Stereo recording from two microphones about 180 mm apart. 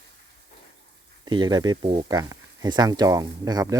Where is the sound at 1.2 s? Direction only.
25° right (ahead or behind).